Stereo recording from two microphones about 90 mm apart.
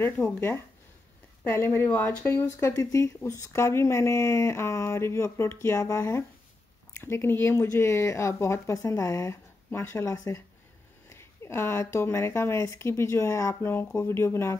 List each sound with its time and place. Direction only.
0.0 s speech: 25° left (ahead or behind)
2.3 s speech: 40° left (ahead or behind)